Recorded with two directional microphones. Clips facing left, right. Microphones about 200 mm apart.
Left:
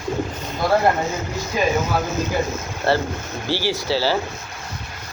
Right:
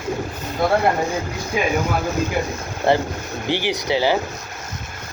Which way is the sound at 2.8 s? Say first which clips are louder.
Right 2 dB; 15° right (ahead or behind).